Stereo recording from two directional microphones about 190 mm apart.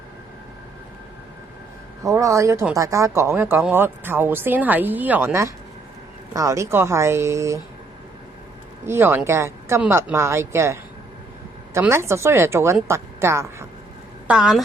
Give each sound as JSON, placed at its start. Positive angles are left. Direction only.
{"t": 2.0, "sound": "speech", "side_deg": -15}
{"t": 8.9, "sound": "a woman's voice", "side_deg": -10}
{"t": 14.3, "sound": "a woman's voice", "side_deg": -5}